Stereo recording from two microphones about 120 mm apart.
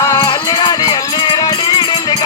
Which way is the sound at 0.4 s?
30° left (ahead or behind).